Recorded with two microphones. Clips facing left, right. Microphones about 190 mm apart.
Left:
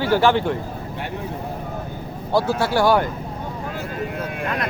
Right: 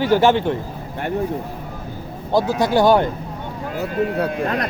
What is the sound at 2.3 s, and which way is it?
Speech, 15° right (ahead or behind).